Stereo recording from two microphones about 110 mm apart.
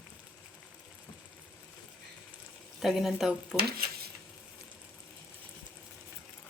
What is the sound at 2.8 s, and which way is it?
Speech, centre (ahead or behind).